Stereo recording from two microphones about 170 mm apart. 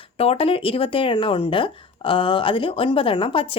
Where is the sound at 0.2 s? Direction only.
35° left (ahead or behind).